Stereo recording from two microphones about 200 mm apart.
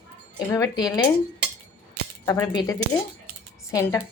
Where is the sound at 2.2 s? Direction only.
20° left (ahead or behind).